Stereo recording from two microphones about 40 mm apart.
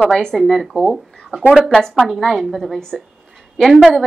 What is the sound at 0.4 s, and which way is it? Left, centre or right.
Speech, centre.